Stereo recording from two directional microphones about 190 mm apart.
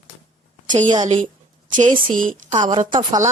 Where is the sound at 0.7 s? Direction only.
40° right (ahead or behind).